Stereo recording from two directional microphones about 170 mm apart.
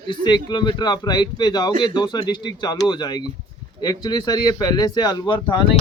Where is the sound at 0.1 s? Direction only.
25° left (ahead or behind).